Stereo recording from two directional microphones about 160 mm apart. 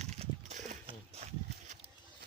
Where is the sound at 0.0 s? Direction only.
45° right (ahead or behind).